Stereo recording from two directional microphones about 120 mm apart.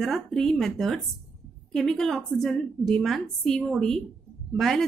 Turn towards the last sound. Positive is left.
turn(degrees=0)  # may be behind; listen again after turning